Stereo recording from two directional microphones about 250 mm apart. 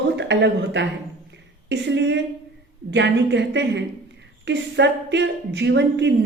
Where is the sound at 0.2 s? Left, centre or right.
Right.